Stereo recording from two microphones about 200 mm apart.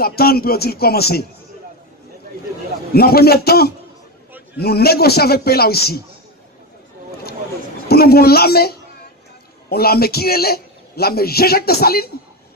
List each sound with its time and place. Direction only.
0.0 s a man's voice: 50° left (ahead or behind)
2.9 s a man's voice: 50° left (ahead or behind)
7.9 s a man's voice: 50° left (ahead or behind)